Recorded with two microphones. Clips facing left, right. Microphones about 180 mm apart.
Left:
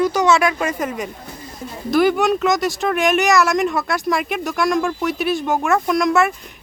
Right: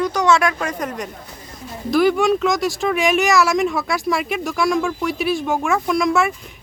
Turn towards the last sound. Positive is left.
turn(degrees=0)  # may be behind; listen again after turning